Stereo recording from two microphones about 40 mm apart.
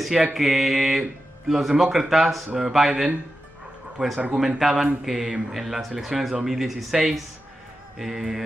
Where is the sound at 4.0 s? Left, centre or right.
Centre.